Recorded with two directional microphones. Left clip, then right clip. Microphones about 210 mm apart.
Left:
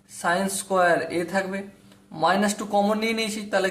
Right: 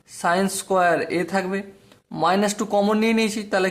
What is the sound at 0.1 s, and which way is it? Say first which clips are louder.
Speech: right 3 dB; 35° right (ahead or behind).